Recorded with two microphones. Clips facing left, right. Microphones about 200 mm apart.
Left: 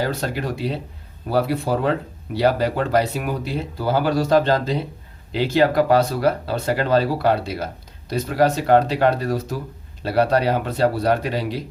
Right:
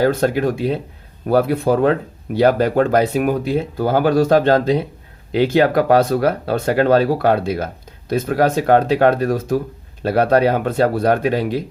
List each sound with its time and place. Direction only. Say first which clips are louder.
0.0 s speech: right 8 dB; 50° right (ahead or behind)